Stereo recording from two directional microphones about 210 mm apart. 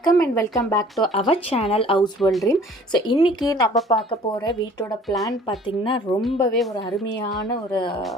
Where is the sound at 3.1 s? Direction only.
20° left (ahead or behind).